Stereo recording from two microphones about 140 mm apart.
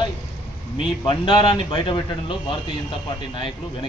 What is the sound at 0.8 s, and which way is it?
Speech, 35° left (ahead or behind).